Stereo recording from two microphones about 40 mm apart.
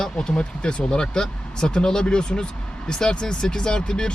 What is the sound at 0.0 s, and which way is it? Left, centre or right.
Speech, centre.